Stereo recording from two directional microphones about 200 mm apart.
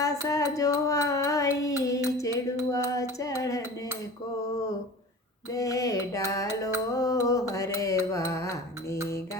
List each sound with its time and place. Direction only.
0.0 s a sound: 15° left (ahead or behind)
5.5 s music: 15° left (ahead or behind)
6.9 s mantra: 15° left (ahead or behind)
8.1 s music: 15° left (ahead or behind)
9.0 s mantra: 15° left (ahead or behind)